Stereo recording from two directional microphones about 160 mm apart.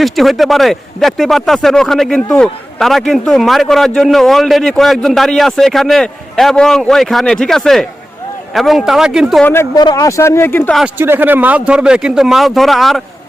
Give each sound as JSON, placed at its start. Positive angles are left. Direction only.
{"t": 0.0, "sound": "speech", "side_deg": 0}
{"t": 9.4, "sound": "speech", "side_deg": 15}
{"t": 10.8, "sound": "speech", "side_deg": -10}